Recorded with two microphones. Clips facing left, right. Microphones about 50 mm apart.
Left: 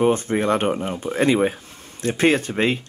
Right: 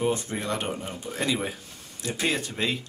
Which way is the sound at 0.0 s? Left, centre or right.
Left.